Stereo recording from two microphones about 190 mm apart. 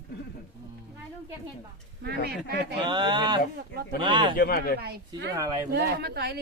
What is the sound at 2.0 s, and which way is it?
Speech, 60° right (ahead or behind).